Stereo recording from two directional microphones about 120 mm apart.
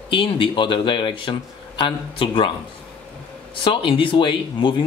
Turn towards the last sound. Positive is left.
turn(degrees=45)  # may be behind; listen again after turning